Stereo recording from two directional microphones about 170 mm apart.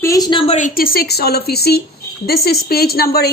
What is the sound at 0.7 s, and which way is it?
Speech, 60° left (ahead or behind).